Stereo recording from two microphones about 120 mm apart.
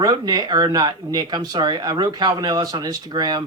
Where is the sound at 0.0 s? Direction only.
35° right (ahead or behind).